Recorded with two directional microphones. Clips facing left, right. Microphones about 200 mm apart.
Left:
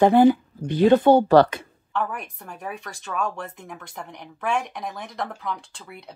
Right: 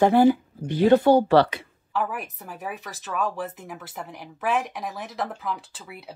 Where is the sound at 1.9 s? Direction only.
5° right (ahead or behind).